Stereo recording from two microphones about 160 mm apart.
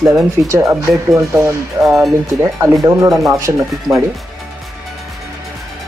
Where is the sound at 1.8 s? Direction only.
Centre (ahead or behind).